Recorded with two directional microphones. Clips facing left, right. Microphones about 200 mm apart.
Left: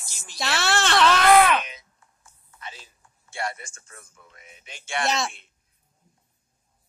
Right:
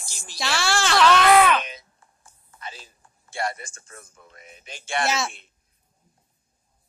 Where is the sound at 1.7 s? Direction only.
35° right (ahead or behind).